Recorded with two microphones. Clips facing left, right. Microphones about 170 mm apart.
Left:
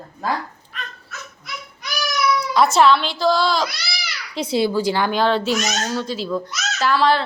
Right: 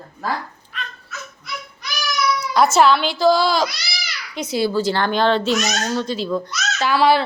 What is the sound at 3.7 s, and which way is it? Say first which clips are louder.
Babbling: left 1 dB; 60° left (ahead or behind).